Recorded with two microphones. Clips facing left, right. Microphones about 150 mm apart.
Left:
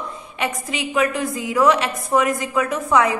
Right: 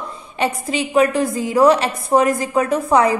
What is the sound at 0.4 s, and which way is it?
A woman's voice, 35° right (ahead or behind).